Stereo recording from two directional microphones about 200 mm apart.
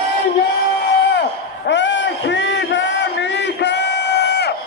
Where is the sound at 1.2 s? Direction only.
60° left (ahead or behind).